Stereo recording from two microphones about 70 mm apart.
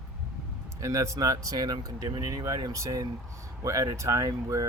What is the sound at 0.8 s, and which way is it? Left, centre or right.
Speech, right.